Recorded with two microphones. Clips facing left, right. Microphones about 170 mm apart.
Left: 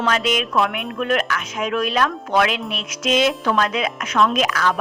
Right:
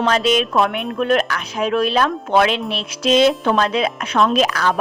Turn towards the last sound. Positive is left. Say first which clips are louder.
# right 3 dB
turn(degrees=-35)  # may be behind; listen again after turning